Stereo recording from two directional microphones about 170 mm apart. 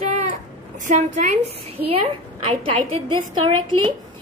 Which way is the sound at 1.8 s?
35° right (ahead or behind).